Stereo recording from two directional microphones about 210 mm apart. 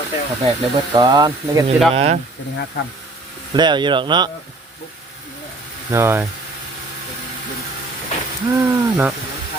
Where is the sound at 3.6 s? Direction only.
20° right (ahead or behind).